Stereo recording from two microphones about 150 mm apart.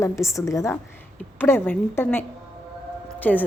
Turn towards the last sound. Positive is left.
turn(degrees=10)  # may be behind; listen again after turning